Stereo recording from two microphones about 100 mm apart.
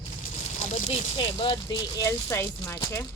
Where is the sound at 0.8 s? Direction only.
60° left (ahead or behind).